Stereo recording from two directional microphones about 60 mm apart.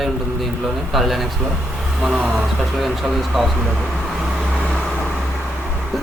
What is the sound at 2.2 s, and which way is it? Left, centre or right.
Speech, centre.